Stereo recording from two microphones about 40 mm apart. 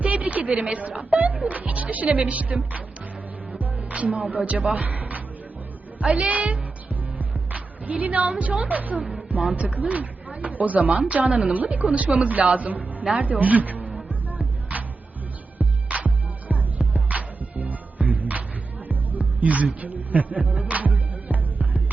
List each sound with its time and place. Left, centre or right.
0.0 s speech: right
3.5 s music: right
4.4 s speech: right
6.2 s speech: right
7.5 s music: right
8.4 s speech: right
8.6 s a man's voice: right
14.1 s music: right